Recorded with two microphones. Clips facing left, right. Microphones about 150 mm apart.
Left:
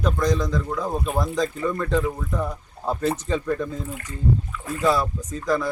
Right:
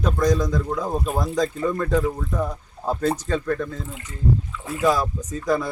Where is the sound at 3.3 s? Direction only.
15° left (ahead or behind).